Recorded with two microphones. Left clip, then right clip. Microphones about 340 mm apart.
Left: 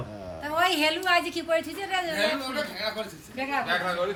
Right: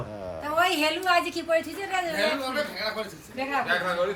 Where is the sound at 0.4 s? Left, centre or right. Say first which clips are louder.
Right 1 dB; centre.